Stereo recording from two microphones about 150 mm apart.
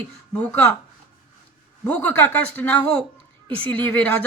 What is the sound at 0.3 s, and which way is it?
Speech, 10° left (ahead or behind).